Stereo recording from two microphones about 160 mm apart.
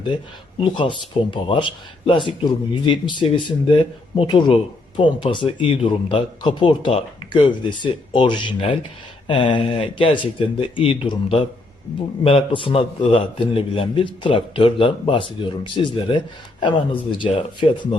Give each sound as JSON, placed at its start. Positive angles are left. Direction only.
{"t": 0.6, "sound": "speech", "side_deg": 30}